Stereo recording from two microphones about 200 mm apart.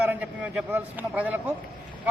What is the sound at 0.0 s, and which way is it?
A man's voice, 10° right (ahead or behind).